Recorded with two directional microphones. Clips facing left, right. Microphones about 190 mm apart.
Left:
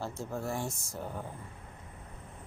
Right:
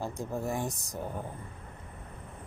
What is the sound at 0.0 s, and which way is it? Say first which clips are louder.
Speech: right 2 dB; 15° right (ahead or behind).